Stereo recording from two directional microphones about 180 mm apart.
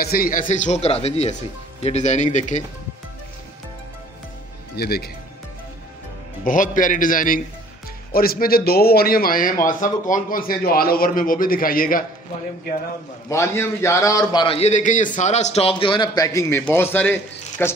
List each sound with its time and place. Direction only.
0.0 s speech: 55° left (ahead or behind)
4.7 s speech: 60° left (ahead or behind)
6.4 s a man's voice: 45° left (ahead or behind)
13.3 s a man's voice: 15° left (ahead or behind)